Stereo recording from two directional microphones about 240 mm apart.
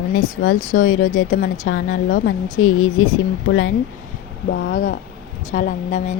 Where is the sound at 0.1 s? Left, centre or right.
Left.